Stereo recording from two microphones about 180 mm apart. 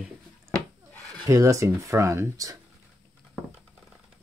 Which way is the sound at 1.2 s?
20° right (ahead or behind).